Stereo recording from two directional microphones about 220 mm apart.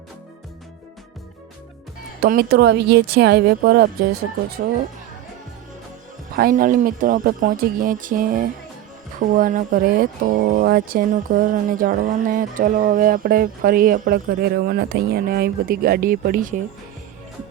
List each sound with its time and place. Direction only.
2.2 s a woman's voice: 45° right (ahead or behind)
6.3 s speech: 40° right (ahead or behind)